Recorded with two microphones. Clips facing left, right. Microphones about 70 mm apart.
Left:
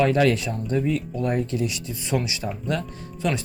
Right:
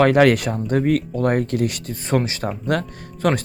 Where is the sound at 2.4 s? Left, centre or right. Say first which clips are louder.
Right 5 dB; right.